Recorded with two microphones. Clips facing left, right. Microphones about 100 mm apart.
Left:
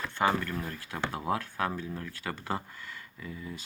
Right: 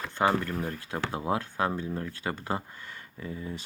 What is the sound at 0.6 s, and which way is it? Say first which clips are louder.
Speech: right 2 dB; 20° right (ahead or behind).